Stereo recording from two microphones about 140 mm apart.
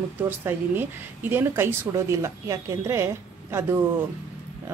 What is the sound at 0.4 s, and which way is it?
A woman's voice, 15° right (ahead or behind).